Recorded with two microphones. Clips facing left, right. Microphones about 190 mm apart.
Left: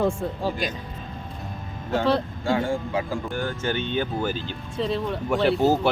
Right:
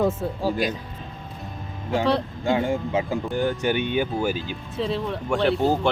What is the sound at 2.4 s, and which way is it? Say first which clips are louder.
Speech: right 1 dB; 20° right (ahead or behind).